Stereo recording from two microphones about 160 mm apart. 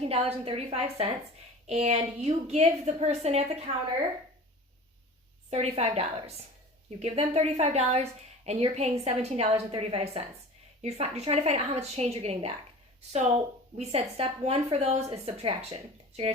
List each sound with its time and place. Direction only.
0.0 s a woman's voice: 40° right (ahead or behind)
5.5 s a woman's voice: 40° right (ahead or behind)